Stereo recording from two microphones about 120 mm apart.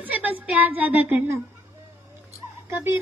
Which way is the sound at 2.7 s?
20° right (ahead or behind).